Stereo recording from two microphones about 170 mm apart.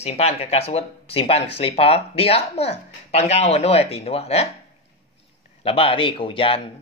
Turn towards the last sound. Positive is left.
turn(degrees=30)  # may be behind; listen again after turning